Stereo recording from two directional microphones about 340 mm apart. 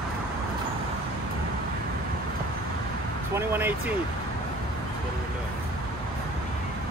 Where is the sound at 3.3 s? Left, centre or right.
Centre.